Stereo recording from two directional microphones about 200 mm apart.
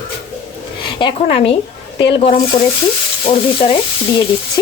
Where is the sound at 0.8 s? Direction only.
25° left (ahead or behind).